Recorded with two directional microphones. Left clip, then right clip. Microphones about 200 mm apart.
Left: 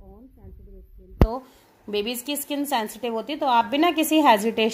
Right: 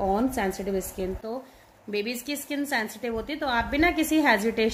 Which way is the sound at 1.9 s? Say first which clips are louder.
Left 3 dB; 20° left (ahead or behind).